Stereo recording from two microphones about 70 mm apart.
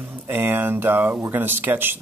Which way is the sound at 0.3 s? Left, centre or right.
Right.